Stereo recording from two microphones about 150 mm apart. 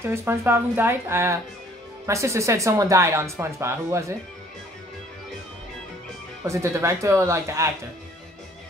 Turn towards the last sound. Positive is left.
turn(degrees=-20)  # may be behind; listen again after turning